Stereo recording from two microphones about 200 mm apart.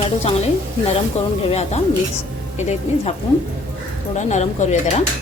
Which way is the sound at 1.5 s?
35° left (ahead or behind).